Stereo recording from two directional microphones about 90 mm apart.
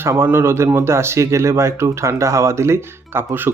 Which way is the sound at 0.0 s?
25° right (ahead or behind).